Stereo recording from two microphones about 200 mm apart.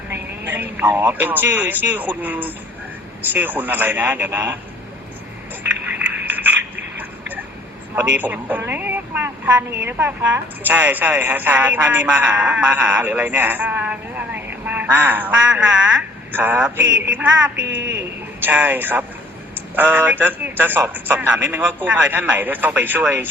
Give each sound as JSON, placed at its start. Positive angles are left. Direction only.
{"t": 0.1, "sound": "a woman's voice", "side_deg": -10}
{"t": 6.2, "sound": "a sound", "side_deg": -10}
{"t": 8.0, "sound": "a woman's voice", "side_deg": -10}
{"t": 17.7, "sound": "speech", "side_deg": -65}
{"t": 18.4, "sound": "a woman's voice", "side_deg": -10}